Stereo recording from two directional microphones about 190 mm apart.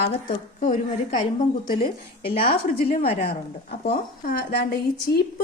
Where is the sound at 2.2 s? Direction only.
50° left (ahead or behind).